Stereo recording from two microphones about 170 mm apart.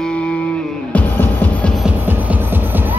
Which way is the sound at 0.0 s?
5° left (ahead or behind).